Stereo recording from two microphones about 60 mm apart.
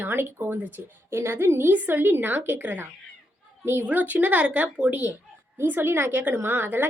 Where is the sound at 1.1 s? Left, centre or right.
Right.